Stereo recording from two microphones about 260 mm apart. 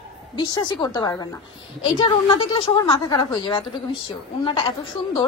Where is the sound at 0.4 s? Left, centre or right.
Centre.